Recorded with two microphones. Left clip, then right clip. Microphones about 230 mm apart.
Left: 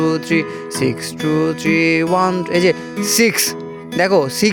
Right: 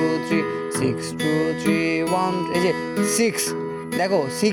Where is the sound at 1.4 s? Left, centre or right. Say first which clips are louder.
Left 8 dB; left.